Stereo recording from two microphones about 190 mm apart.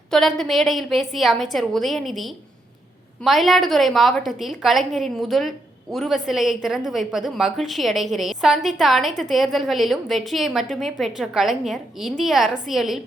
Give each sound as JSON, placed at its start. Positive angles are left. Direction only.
{"t": 0.1, "sound": "a woman's voice", "side_deg": 0}